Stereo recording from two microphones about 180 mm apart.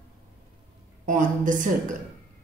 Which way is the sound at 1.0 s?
45° right (ahead or behind).